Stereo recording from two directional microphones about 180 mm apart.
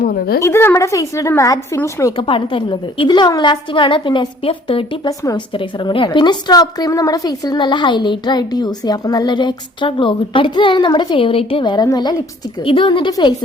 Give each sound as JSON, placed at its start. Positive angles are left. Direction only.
{"t": 0.0, "sound": "a woman's voice", "side_deg": 60}
{"t": 0.4, "sound": "a woman's voice", "side_deg": 15}
{"t": 2.2, "sound": "a woman's voice", "side_deg": 30}
{"t": 5.0, "sound": "a woman's voice", "side_deg": 20}